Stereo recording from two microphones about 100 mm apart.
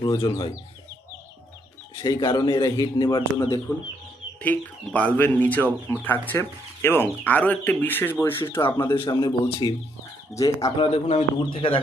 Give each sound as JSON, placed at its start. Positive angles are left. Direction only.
{"t": 0.0, "sound": "speech", "side_deg": 40}
{"t": 2.0, "sound": "speech", "side_deg": 45}
{"t": 4.4, "sound": "speech", "side_deg": 15}
{"t": 8.6, "sound": "speech", "side_deg": 30}
{"t": 10.8, "sound": "speech", "side_deg": 60}
{"t": 11.3, "sound": "speech", "side_deg": 60}